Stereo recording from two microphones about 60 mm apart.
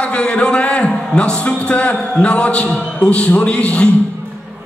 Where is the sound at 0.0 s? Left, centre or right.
Centre.